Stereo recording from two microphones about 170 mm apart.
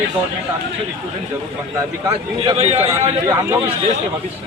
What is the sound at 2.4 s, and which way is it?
Speech, 35° right (ahead or behind).